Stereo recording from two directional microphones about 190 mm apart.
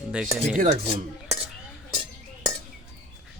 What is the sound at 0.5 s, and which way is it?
Speech, 40° right (ahead or behind).